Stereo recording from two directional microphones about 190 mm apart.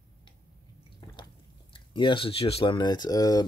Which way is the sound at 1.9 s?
25° left (ahead or behind).